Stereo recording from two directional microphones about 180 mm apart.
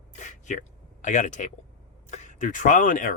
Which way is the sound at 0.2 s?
45° left (ahead or behind).